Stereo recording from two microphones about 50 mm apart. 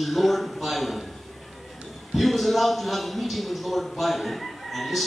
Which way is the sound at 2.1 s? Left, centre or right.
Centre.